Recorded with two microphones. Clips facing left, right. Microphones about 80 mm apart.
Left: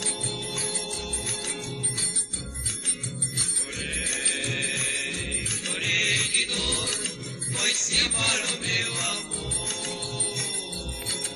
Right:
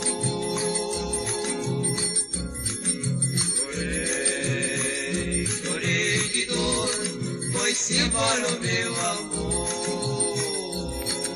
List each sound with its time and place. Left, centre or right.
0.5 s organ: centre
6.1 s music: right
7.9 s music: right
8.5 s mantra: right